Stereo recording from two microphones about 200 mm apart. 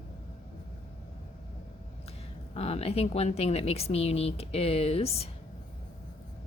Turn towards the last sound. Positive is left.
turn(degrees=30)  # may be behind; listen again after turning